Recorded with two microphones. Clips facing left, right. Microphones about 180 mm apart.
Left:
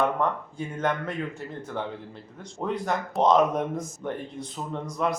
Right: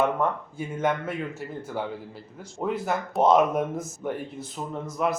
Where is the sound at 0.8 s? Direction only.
5° right (ahead or behind).